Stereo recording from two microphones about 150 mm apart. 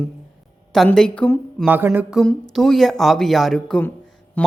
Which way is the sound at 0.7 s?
5° left (ahead or behind).